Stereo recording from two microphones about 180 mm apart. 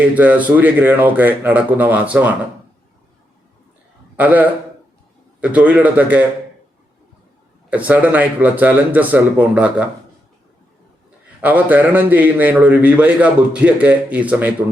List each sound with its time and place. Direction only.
0.0 s a man's voice: 10° right (ahead or behind)
4.2 s a man's voice: 10° right (ahead or behind)
7.7 s a man's voice: 10° right (ahead or behind)
11.3 s a man's voice: 10° right (ahead or behind)